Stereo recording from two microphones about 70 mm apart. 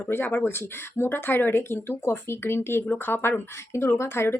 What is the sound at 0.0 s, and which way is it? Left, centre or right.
Speech, left.